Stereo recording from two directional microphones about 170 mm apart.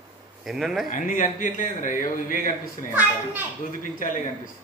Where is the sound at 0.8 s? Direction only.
50° left (ahead or behind).